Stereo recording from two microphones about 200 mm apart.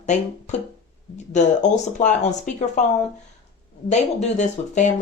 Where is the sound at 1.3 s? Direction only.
35° left (ahead or behind).